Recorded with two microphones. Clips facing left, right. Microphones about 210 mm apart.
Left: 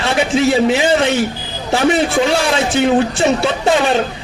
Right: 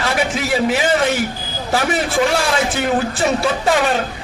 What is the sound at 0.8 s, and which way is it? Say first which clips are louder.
Speech: left 3 dB; 25° left (ahead or behind).